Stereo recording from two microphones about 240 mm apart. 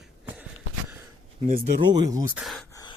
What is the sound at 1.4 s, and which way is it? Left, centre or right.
Speech, right.